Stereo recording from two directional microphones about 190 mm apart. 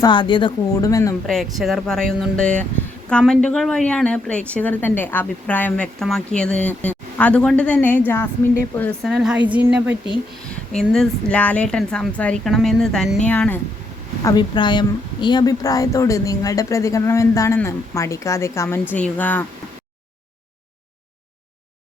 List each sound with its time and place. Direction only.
0.0 s speech: 25° left (ahead or behind)
1.3 s a woman's voice: centre (ahead or behind)
10.9 s a woman's voice: 5° left (ahead or behind)
14.3 s a woman's voice: 25° left (ahead or behind)